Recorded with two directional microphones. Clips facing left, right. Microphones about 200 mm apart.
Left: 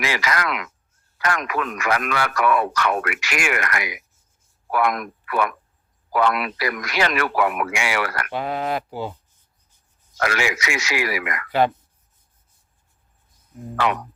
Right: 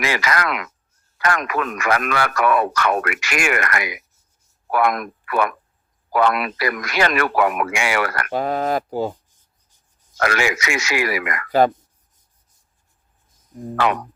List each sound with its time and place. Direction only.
0.0 s speech: 50° right (ahead or behind)
10.2 s speech: 50° right (ahead or behind)
13.5 s speech: 45° right (ahead or behind)